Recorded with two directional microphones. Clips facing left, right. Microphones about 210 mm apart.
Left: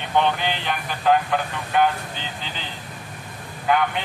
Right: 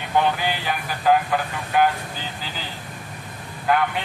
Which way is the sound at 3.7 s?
5° right (ahead or behind).